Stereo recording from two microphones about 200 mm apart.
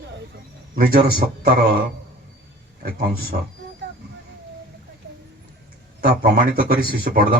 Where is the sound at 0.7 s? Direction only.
45° right (ahead or behind).